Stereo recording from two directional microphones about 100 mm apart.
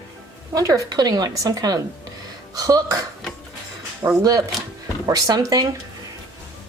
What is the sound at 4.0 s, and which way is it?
A woman's voice, 35° right (ahead or behind).